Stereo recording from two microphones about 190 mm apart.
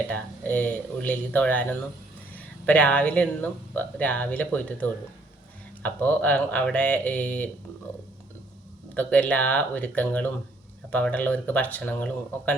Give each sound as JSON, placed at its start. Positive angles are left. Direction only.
{"t": 0.1, "sound": "speech", "side_deg": 10}
{"t": 9.0, "sound": "speech", "side_deg": 10}